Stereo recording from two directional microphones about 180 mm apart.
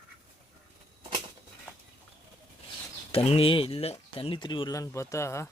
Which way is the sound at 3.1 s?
35° left (ahead or behind).